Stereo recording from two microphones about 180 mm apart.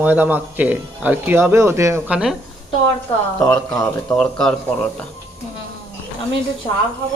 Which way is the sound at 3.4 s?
5° left (ahead or behind).